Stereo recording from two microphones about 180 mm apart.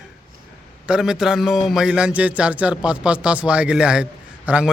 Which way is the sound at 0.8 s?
5° right (ahead or behind).